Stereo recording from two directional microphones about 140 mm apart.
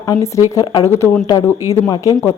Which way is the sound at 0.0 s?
20° left (ahead or behind).